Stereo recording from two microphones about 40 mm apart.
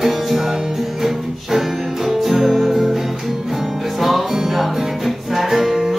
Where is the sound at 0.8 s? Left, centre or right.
Centre.